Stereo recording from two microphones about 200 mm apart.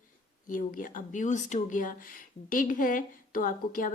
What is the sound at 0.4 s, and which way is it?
A woman's voice, 40° left (ahead or behind).